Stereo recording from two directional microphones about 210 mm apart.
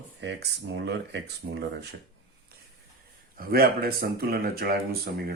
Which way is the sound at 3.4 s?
45° right (ahead or behind).